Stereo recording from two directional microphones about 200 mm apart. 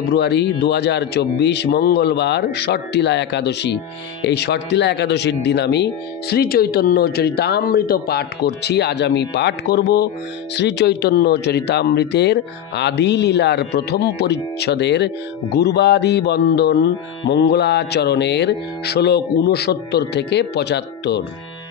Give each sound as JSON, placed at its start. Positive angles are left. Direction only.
{"t": 0.1, "sound": "speech", "side_deg": 55}